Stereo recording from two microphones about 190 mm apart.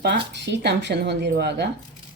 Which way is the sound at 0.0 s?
65° right (ahead or behind).